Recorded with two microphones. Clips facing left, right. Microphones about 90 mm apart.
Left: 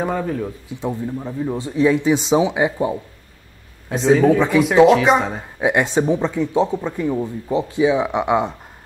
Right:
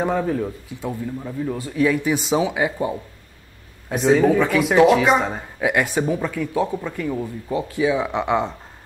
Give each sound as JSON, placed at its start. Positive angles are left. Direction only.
{"t": 0.0, "sound": "speech", "side_deg": 0}
{"t": 0.7, "sound": "speech", "side_deg": 20}
{"t": 3.9, "sound": "speech", "side_deg": 0}
{"t": 5.6, "sound": "speech", "side_deg": 25}